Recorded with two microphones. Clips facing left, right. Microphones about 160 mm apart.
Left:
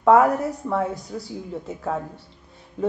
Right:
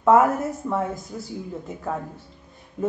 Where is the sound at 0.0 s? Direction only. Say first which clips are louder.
Left 1 dB; centre (ahead or behind).